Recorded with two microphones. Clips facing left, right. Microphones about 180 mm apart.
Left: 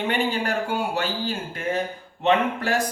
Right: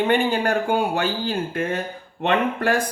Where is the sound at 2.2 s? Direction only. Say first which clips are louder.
Right 1 dB; 55° right (ahead or behind).